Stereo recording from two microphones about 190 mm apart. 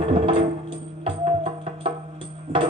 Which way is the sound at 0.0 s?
30° right (ahead or behind).